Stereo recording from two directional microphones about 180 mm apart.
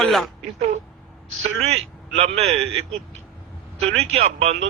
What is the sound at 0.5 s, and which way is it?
Speech, 35° right (ahead or behind).